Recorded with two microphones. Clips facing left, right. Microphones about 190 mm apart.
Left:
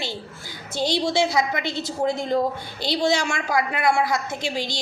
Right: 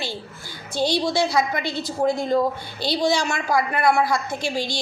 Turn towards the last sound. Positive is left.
turn(degrees=20)  # may be behind; listen again after turning